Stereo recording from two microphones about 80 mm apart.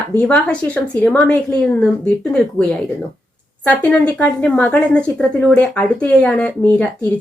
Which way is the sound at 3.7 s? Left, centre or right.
Centre.